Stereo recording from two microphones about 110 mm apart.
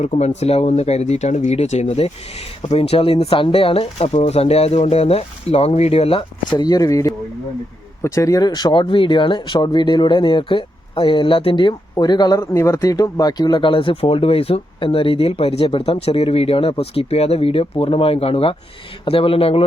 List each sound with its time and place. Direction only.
0.0 s speech: 90° left; by 6.2 s 60° left (ahead or behind)
6.5 s speech: 35° left (ahead or behind)
12.4 s speech: 25° left (ahead or behind); by 19.6 s 60° left (ahead or behind)